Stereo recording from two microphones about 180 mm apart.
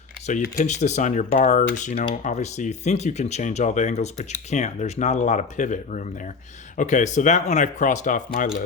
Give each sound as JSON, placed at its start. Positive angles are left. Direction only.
{"t": 0.4, "sound": "speech", "side_deg": 45}